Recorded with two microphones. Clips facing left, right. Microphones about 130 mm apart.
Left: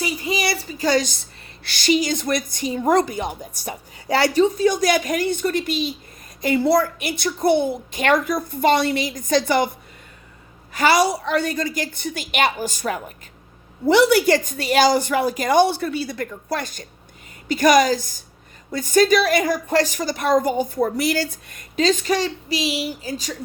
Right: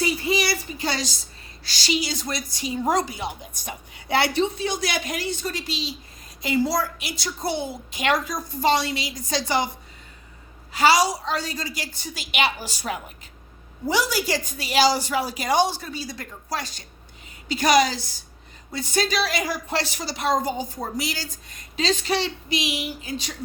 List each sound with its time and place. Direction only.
0.0 s a woman's voice: 20° left (ahead or behind); by 9.6 s 55° left (ahead or behind)
10.7 s a woman's voice: 50° left (ahead or behind)
13.8 s a woman's voice: 60° left (ahead or behind); by 23.3 s 40° left (ahead or behind)